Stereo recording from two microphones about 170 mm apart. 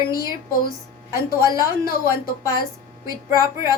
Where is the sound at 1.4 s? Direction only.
20° right (ahead or behind).